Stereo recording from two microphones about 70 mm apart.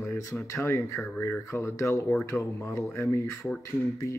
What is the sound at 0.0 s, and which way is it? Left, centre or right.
Speech, left.